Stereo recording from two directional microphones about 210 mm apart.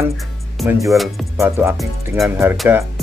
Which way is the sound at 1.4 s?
10° right (ahead or behind).